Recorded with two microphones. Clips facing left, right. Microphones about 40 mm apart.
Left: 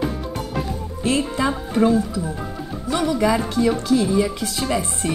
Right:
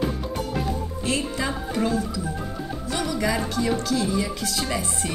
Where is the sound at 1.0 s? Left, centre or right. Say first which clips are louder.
Left 6 dB; left.